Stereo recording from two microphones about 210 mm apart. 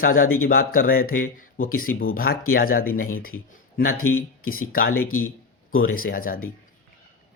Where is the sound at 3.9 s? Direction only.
80° left.